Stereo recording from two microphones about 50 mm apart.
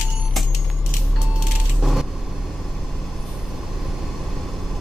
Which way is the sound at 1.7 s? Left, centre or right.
Centre.